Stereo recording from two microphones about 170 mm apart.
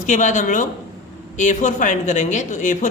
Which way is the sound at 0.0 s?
45° left (ahead or behind).